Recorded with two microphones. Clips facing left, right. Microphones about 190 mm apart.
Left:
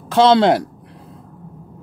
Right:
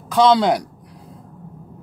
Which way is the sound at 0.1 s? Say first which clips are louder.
Left 2 dB; 25° left (ahead or behind).